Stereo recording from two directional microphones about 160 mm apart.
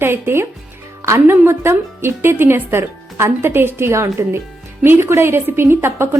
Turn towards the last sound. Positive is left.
turn(degrees=-15)  # may be behind; listen again after turning